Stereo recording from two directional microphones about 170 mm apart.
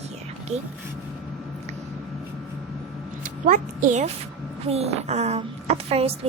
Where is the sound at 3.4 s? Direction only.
50° right (ahead or behind).